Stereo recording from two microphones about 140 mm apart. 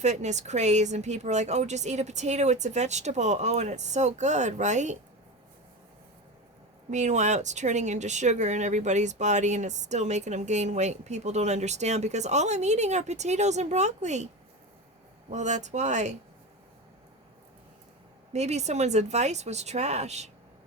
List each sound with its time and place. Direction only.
0.0 s speech: 55° right (ahead or behind)
6.9 s speech: 55° right (ahead or behind)
15.3 s speech: 60° right (ahead or behind)
18.3 s speech: 50° right (ahead or behind)